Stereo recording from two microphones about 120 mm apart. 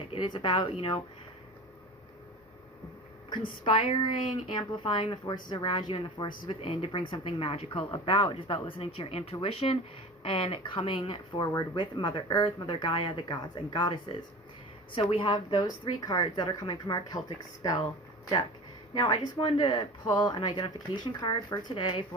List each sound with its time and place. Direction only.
0.1 s speech: 40° left (ahead or behind)
3.2 s speech: 40° left (ahead or behind)
5.2 s speech: 35° left (ahead or behind)
18.9 s speech: 35° left (ahead or behind)
19.4 s speech: 50° left (ahead or behind)